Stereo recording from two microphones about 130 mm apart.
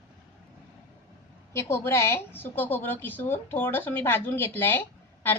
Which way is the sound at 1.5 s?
20° left (ahead or behind).